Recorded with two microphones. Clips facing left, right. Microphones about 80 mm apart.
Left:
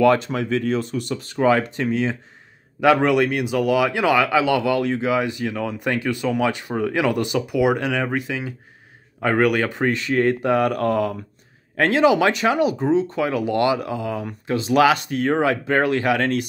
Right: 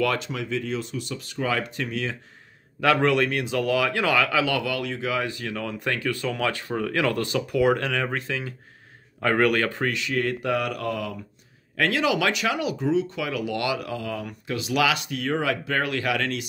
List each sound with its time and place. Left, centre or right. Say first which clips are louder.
0.0 s speech: left 9 dB; left
0.3 s speech: left 7 dB; left
1.2 s speech: left 9 dB; left
2.8 s speech: left 4 dB; centre; by 5.1 s left
5.1 s speech: left 6 dB; centre
9.8 s speech: left 6 dB; left